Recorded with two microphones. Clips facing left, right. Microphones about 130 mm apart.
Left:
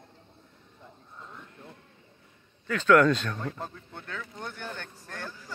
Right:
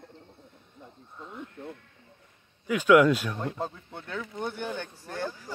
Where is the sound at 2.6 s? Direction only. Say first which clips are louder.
Right 2 dB; 10° right (ahead or behind).